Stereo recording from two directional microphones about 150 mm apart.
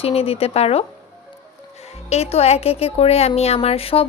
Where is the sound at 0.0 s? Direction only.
40° left (ahead or behind).